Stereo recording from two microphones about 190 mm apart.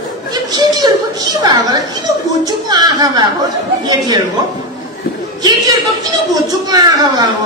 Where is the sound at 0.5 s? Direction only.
20° right (ahead or behind).